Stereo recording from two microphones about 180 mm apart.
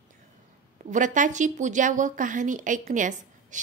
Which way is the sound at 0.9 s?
45° right (ahead or behind).